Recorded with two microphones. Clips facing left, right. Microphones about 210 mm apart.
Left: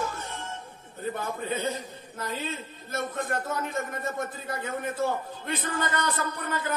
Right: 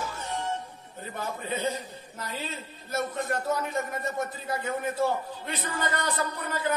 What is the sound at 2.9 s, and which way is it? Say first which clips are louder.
A man's voice: right 1 dB; 50° left (ahead or behind).